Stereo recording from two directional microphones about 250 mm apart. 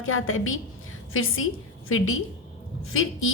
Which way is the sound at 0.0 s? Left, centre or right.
Left.